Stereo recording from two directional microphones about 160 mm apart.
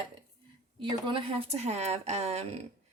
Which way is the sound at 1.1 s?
35° right (ahead or behind).